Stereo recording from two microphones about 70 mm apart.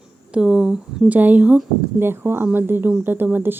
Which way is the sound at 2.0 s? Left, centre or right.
Right.